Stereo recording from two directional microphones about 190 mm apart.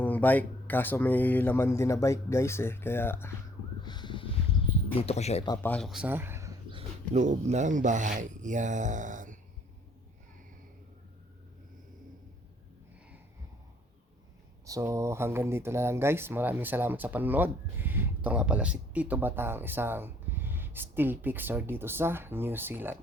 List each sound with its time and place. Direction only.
0.0 s speech: 10° left (ahead or behind)
3.8 s a sound: 25° left (ahead or behind)
5.0 s speech: 35° left (ahead or behind)
5.6 s speech: 5° left (ahead or behind); by 6.5 s 10° right (ahead or behind)
6.7 s speech: 30° right (ahead or behind)
14.7 s speech: 15° right (ahead or behind)